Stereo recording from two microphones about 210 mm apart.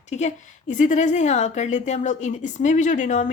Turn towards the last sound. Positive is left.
turn(degrees=35)  # may be behind; listen again after turning